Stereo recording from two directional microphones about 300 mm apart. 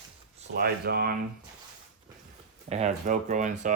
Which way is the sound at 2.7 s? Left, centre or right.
Right.